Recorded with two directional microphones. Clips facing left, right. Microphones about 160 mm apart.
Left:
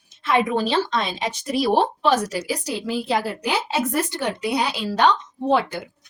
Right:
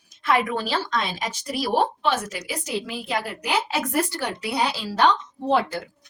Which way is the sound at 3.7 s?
20° left (ahead or behind).